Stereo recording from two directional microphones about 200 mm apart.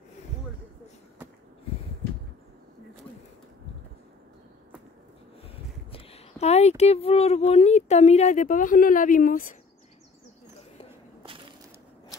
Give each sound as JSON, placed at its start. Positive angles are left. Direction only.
{"t": 5.9, "sound": "speech", "side_deg": 30}